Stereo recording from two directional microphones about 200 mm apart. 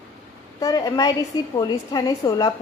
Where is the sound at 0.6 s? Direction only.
20° left (ahead or behind).